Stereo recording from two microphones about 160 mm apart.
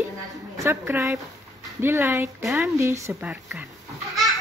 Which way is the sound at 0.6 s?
15° right (ahead or behind).